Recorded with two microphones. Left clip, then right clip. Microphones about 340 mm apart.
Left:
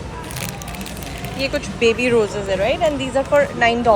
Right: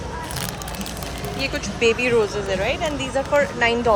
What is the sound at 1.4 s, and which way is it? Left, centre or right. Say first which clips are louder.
Speech: left 3 dB; centre.